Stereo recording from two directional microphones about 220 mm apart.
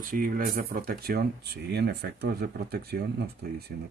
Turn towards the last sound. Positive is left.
turn(degrees=-45)  # may be behind; listen again after turning